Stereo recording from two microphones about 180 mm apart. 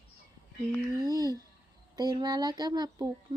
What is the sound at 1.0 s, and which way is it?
A woman's voice, 20° right (ahead or behind).